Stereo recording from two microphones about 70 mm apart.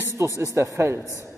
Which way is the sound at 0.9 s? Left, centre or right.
Left.